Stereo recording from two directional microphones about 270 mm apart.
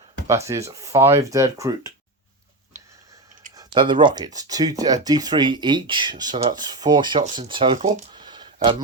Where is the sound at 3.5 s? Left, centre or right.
Centre.